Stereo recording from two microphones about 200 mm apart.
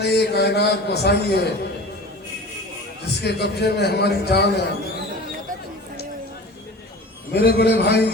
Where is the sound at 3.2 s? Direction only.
55° left (ahead or behind).